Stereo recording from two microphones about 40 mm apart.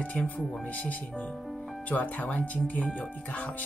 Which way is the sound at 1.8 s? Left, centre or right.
Left.